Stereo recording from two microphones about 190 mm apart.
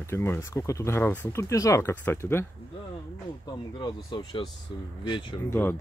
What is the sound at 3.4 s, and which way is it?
Speech, 25° left (ahead or behind).